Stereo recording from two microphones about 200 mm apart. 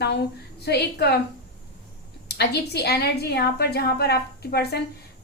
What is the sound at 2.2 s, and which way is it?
A woman's voice, 55° left (ahead or behind).